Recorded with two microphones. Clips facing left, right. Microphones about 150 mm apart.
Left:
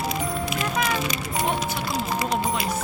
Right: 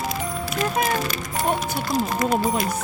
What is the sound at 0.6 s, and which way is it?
Music, 45° right (ahead or behind).